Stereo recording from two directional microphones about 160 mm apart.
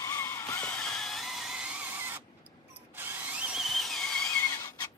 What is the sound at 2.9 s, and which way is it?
Tools, 15° right (ahead or behind).